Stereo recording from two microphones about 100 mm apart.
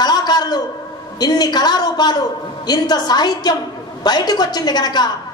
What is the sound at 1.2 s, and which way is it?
A woman's voice, 45° left (ahead or behind).